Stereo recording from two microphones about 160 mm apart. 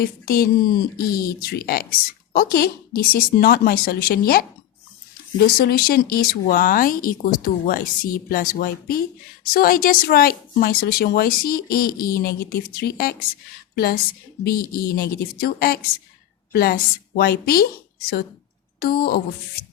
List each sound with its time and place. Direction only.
0.0 s a woman's voice: 70° left (ahead or behind)